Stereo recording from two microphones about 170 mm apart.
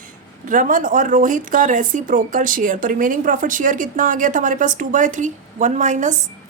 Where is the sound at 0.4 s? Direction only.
50° right (ahead or behind).